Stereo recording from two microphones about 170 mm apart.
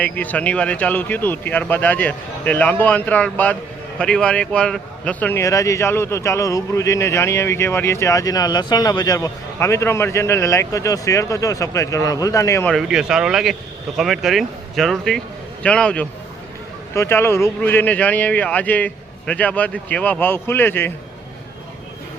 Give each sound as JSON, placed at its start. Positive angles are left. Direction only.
{"t": 0.0, "sound": "speech", "side_deg": 10}
{"t": 12.6, "sound": "speech", "side_deg": 0}